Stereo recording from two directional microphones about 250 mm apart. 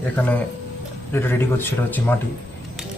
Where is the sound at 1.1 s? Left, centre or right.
Centre.